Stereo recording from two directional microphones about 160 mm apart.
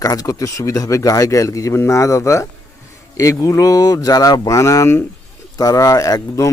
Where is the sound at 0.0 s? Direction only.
20° left (ahead or behind).